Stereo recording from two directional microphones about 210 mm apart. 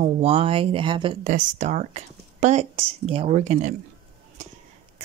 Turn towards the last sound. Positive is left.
turn(degrees=-35)  # may be behind; listen again after turning